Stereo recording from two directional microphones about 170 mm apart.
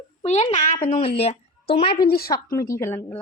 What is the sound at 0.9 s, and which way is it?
A child's voice, 35° left (ahead or behind).